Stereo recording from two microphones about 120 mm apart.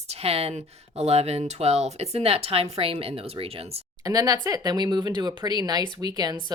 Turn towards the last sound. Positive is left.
turn(degrees=-35)  # may be behind; listen again after turning